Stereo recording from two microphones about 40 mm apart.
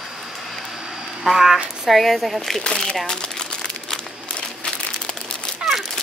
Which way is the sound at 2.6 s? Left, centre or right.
Left.